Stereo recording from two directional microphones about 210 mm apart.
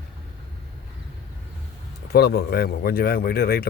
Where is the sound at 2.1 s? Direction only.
50° left (ahead or behind).